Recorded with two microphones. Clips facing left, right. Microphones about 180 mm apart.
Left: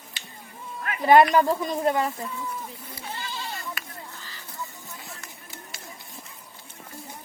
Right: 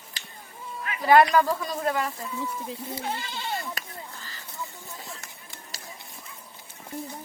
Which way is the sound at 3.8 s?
40° right (ahead or behind).